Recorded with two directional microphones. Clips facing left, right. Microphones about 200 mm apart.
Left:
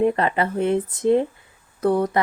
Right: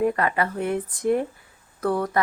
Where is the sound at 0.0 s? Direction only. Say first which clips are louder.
Left 3 dB; 25° left (ahead or behind).